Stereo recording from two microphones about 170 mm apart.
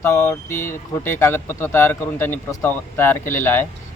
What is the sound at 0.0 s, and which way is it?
Speech, 15° left (ahead or behind).